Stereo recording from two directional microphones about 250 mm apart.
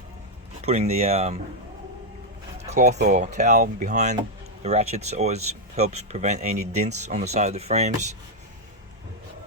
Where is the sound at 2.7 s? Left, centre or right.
Right.